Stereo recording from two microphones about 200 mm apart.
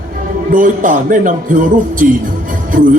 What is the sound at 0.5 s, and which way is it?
A man's voice, 40° right (ahead or behind).